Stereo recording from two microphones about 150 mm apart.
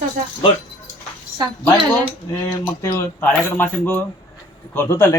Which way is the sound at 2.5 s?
20° left (ahead or behind).